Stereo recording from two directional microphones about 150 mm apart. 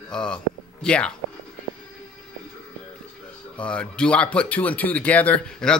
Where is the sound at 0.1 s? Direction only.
5° left (ahead or behind).